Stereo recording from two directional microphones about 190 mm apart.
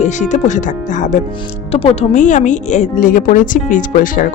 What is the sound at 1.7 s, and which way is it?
Speech, 30° left (ahead or behind).